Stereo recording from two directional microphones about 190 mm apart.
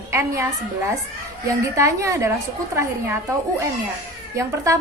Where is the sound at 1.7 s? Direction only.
15° right (ahead or behind).